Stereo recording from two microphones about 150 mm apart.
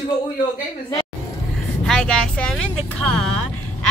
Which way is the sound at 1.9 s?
5° left (ahead or behind).